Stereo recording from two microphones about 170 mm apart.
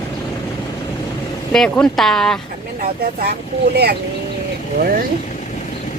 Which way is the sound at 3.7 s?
70° right (ahead or behind).